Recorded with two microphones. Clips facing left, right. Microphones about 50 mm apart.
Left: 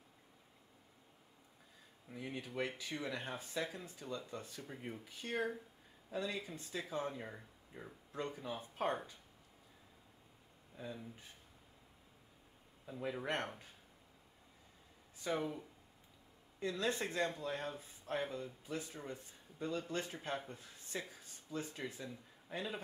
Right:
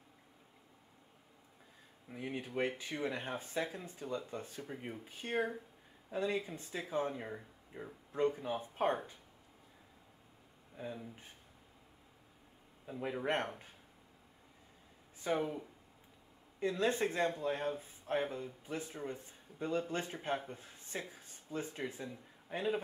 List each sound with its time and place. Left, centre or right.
2.1 s speech: right
4.6 s speech: centre
5.0 s speech: right
10.8 s speech: centre
12.8 s speech: centre
15.3 s speech: centre
16.5 s speech: right
20.5 s a sound: right
21.1 s speech: right